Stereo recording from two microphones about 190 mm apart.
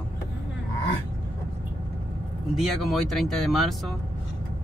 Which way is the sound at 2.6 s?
Centre (ahead or behind).